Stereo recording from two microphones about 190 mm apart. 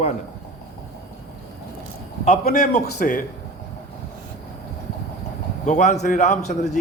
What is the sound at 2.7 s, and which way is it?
Speech, 40° left (ahead or behind).